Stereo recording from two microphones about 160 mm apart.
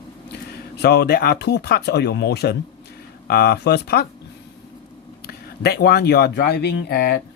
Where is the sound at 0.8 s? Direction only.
80° left.